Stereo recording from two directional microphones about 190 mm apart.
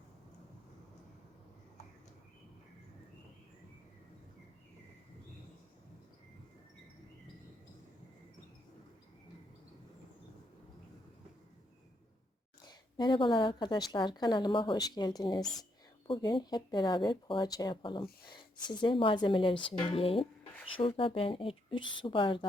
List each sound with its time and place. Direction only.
12.6 s speech: 25° left (ahead or behind)